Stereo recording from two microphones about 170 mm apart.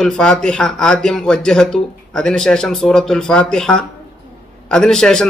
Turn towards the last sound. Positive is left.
turn(degrees=5)  # may be behind; listen again after turning